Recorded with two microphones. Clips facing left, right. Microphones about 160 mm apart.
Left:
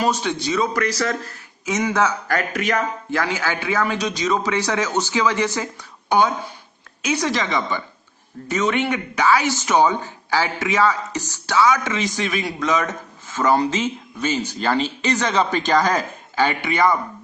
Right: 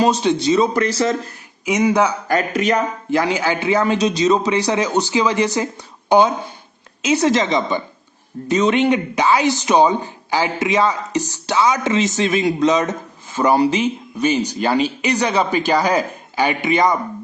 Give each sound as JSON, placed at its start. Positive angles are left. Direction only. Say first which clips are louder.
{"t": 0.0, "sound": "speech", "louder": "right 6 dB", "side_deg": -20}
{"t": 1.6, "sound": "speech", "louder": "right 4 dB", "side_deg": -15}